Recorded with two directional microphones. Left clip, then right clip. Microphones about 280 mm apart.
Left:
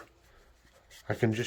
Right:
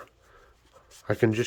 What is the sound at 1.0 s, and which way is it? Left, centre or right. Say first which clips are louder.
Speech: right 6 dB; centre.